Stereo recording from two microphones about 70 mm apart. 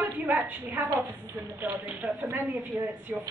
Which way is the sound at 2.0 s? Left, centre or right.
Centre.